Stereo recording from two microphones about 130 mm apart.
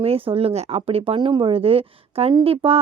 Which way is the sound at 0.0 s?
45° right (ahead or behind).